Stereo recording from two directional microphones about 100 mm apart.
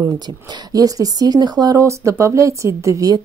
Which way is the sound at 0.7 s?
35° right (ahead or behind).